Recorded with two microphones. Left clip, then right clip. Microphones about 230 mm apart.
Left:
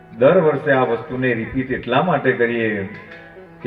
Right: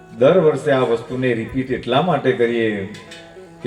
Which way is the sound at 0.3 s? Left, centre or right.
Right.